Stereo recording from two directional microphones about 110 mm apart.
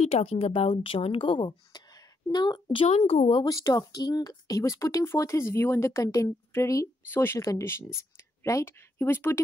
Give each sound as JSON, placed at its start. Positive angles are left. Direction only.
{"t": 0.0, "sound": "a woman's voice", "side_deg": 70}
{"t": 3.0, "sound": "a woman's voice", "side_deg": 60}
{"t": 3.4, "sound": "speech", "side_deg": 30}